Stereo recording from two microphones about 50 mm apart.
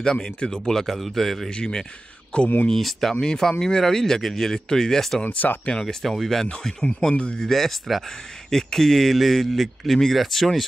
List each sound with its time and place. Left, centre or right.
0.0 s speech: centre
1.5 s speech: centre
2.7 s speech: centre
5.2 s speech: left
5.7 s speech: centre
6.0 s speech: centre